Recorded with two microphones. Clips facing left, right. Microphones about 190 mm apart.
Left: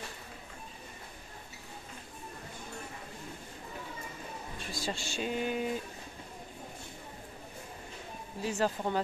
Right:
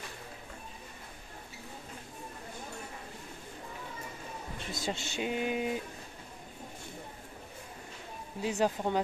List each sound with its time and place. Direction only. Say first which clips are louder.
4.6 s speech: right 1 dB; 20° right (ahead or behind)
8.4 s speech: right 2 dB; 15° right (ahead or behind)